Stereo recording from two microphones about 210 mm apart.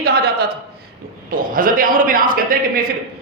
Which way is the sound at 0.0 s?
50° right (ahead or behind).